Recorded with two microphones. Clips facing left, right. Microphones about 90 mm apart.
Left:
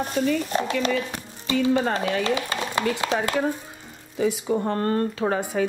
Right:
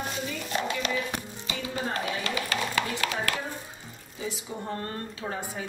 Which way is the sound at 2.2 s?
25° left (ahead or behind).